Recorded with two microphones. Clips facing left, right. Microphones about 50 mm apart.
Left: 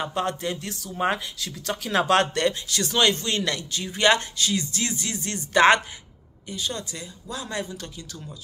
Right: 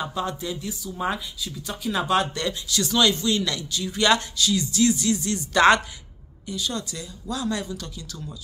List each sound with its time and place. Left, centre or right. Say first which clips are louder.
0.1 s speech: left 2 dB; left
0.9 s speech: left 3 dB; left
1.2 s speech: left 2 dB; left
2.3 s a man's voice: left 3 dB; left